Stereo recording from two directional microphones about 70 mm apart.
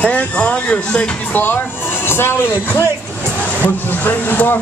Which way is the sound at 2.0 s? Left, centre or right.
Left.